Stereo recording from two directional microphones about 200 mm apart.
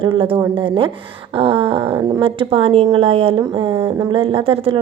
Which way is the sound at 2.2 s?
30° right (ahead or behind).